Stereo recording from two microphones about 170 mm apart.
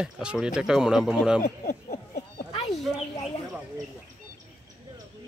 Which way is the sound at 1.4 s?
50° left (ahead or behind).